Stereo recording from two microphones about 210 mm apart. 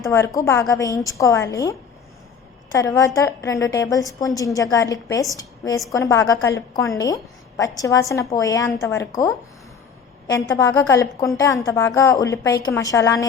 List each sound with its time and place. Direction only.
0.0 s a woman's voice: 15° left (ahead or behind)
2.7 s a woman's voice: 15° left (ahead or behind)
10.2 s a woman's voice: 15° left (ahead or behind)